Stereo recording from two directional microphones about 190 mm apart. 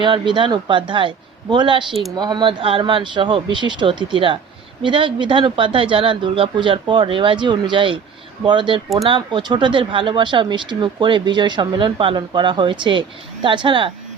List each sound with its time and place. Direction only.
0.0 s speech: 25° right (ahead or behind)
1.9 s speech: centre (ahead or behind)
2.1 s speech: 20° right (ahead or behind)